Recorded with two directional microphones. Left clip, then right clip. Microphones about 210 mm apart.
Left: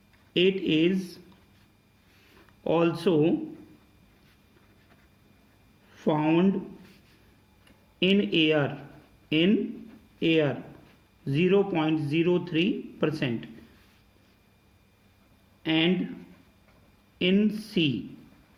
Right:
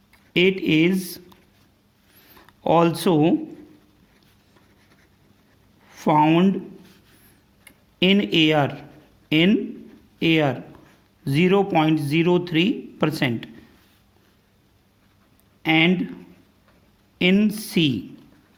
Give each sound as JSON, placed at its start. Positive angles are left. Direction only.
{"t": 0.3, "sound": "speech", "side_deg": -55}
{"t": 2.6, "sound": "speech", "side_deg": -55}
{"t": 5.9, "sound": "speech", "side_deg": -55}
{"t": 7.9, "sound": "speech", "side_deg": -55}
{"t": 15.6, "sound": "speech", "side_deg": -55}
{"t": 17.2, "sound": "speech", "side_deg": -55}